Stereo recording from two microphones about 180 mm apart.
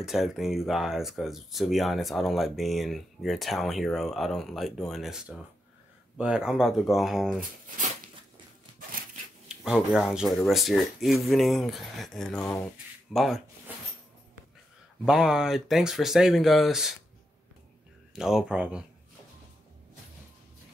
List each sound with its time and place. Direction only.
0.0 s speech: centre (ahead or behind)
9.5 s speech: 5° right (ahead or behind)
15.0 s speech: 5° right (ahead or behind)
18.1 s speech: 5° right (ahead or behind)